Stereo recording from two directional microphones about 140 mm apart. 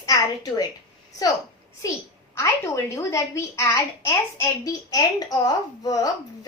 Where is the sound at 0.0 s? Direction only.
30° left (ahead or behind).